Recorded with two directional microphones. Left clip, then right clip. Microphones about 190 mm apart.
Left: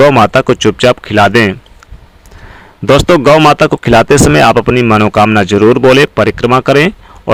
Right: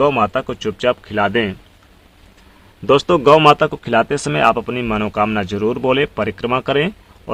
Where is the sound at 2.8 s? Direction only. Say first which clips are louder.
Left 6 dB; 40° left (ahead or behind).